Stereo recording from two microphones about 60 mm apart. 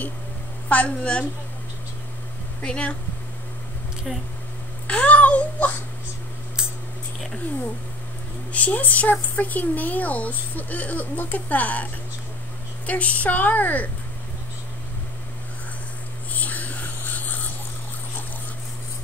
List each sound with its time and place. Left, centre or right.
0.7 s speech: left
2.6 s speech: centre
4.8 s babbling: left
8.5 s speech: left
16.3 s a sound: left